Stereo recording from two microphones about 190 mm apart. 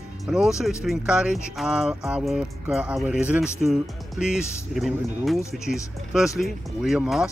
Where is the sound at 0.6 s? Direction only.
Centre (ahead or behind).